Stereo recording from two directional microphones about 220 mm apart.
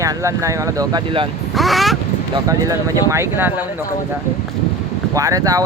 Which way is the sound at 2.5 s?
15° right (ahead or behind).